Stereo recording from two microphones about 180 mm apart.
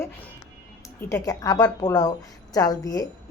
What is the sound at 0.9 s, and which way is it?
A woman's voice, 15° left (ahead or behind).